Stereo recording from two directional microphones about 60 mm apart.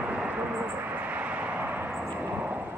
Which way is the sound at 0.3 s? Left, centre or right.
Right.